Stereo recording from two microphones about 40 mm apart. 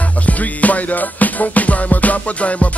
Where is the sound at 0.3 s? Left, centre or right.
Left.